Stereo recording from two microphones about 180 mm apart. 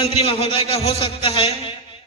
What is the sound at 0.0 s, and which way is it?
A man's voice, 30° left (ahead or behind).